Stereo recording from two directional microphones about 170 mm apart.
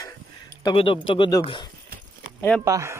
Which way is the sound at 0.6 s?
30° left (ahead or behind).